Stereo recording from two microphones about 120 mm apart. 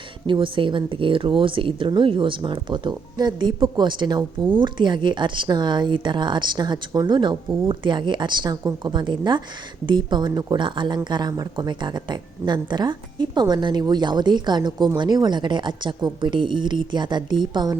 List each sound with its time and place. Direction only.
0.3 s speech: 45° right (ahead or behind)